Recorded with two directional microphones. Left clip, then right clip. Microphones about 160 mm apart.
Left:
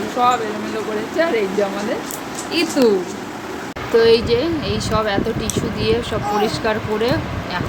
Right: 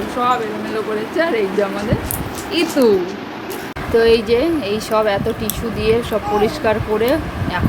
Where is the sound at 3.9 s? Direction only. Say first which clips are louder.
Right 1 dB; 10° right (ahead or behind).